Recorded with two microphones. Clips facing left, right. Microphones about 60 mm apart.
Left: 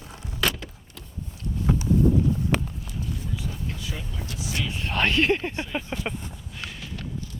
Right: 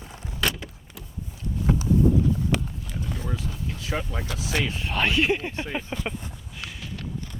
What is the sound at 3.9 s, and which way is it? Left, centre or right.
Speech, right.